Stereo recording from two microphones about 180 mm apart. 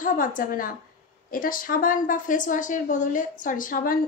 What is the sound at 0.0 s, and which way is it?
A woman's voice, 50° left (ahead or behind).